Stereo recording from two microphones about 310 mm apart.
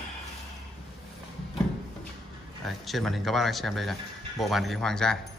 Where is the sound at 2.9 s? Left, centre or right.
Centre.